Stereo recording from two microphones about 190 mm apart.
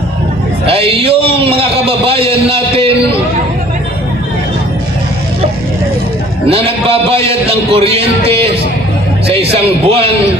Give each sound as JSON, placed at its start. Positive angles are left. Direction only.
{"t": 0.7, "sound": "a man's voice", "side_deg": -30}
{"t": 6.5, "sound": "a man's voice", "side_deg": -30}